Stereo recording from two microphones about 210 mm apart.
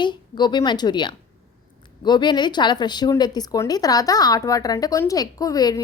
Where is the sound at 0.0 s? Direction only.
20° left (ahead or behind).